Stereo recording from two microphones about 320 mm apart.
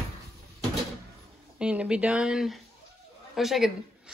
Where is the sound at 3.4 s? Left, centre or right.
Centre.